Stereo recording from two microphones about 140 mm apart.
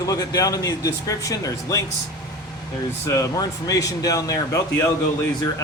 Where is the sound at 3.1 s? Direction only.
25° left (ahead or behind).